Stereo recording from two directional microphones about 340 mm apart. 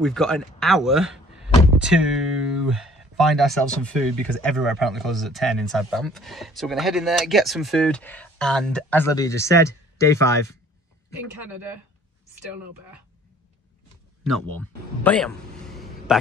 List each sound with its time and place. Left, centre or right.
0.0 s speech: centre
14.3 s speech: centre